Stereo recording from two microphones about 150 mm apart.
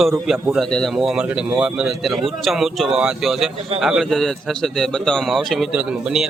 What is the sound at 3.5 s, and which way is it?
Speech, 40° right (ahead or behind).